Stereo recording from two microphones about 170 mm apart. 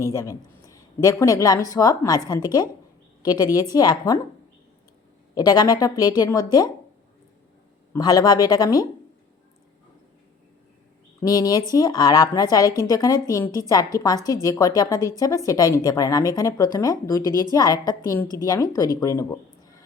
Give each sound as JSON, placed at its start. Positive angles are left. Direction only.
{"t": 0.0, "sound": "a woman's voice", "side_deg": 20}
{"t": 5.3, "sound": "a woman's voice", "side_deg": 25}
{"t": 7.9, "sound": "a woman's voice", "side_deg": 20}
{"t": 11.2, "sound": "a woman's voice", "side_deg": 20}